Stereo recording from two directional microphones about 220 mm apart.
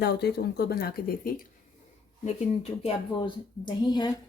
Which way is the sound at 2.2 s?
30° left (ahead or behind).